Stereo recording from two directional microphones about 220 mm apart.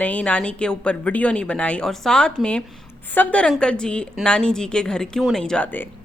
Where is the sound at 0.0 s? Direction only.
5° left (ahead or behind).